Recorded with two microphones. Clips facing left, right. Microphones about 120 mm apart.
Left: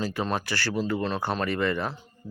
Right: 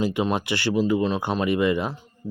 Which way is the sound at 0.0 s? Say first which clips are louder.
Right 5 dB; 20° right (ahead or behind).